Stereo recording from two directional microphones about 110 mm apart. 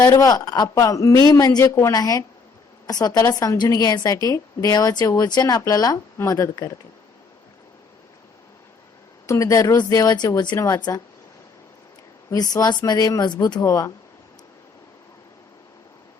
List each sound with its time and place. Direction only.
0.0 s a woman's voice: 30° left (ahead or behind)
9.2 s a woman's voice: 30° left (ahead or behind)
12.3 s a woman's voice: 35° left (ahead or behind)
13.6 s speech: 30° left (ahead or behind)